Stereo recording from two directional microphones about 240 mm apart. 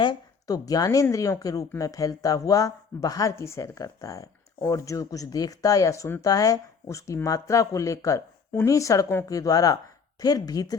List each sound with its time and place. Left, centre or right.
0.0 s a woman's voice: centre